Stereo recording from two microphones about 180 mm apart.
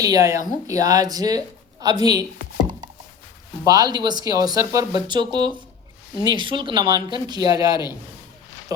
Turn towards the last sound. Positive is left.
turn(degrees=-20)  # may be behind; listen again after turning